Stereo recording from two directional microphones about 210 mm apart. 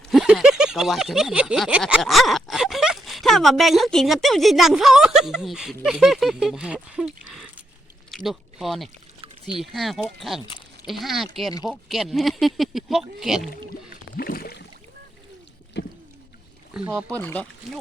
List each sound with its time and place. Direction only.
0.1 s a sound: centre (ahead or behind)
5.8 s speech: centre (ahead or behind)
13.9 s rowboat: 45° left (ahead or behind)
15.8 s a sound: 55° left (ahead or behind)
16.7 s speech: 5° right (ahead or behind)
17.1 s speech: 5° left (ahead or behind)